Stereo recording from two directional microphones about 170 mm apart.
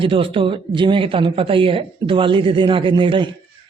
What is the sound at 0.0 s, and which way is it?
A man's voice, 30° right (ahead or behind).